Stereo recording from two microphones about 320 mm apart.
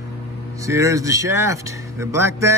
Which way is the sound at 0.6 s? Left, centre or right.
Centre.